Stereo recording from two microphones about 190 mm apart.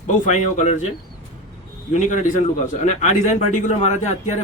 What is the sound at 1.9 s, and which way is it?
Speech, 40° left (ahead or behind).